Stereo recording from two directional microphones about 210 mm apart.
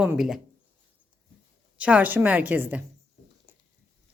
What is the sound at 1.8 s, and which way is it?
A woman's voice, 5° right (ahead or behind).